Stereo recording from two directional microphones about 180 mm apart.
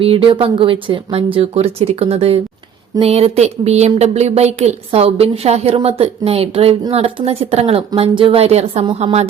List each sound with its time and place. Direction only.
0.0 s speech: 30° right (ahead or behind)